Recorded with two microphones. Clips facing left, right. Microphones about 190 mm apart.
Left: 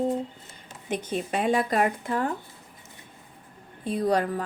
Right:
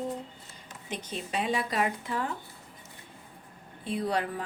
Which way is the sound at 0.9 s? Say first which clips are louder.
Left 7 dB; 50° left (ahead or behind).